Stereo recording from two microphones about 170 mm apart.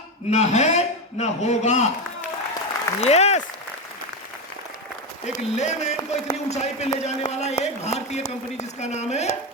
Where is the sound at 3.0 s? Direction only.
40° left (ahead or behind).